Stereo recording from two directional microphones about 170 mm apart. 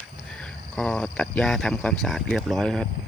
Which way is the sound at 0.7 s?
5° left (ahead or behind).